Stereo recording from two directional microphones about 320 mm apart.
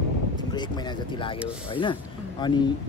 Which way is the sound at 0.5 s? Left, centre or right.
Centre.